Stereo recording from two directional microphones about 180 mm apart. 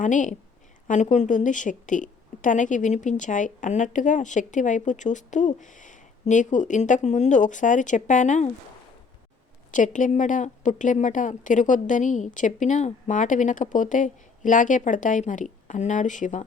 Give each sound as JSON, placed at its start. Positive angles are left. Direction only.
{"t": 0.0, "sound": "a woman's voice", "side_deg": 45}
{"t": 9.7, "sound": "a woman's voice", "side_deg": 45}